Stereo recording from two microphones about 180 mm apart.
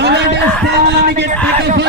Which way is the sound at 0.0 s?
70° right (ahead or behind).